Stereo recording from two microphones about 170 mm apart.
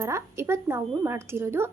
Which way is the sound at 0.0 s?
15° right (ahead or behind).